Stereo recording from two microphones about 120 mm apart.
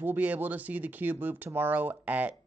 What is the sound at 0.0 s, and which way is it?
Speech, 15° right (ahead or behind).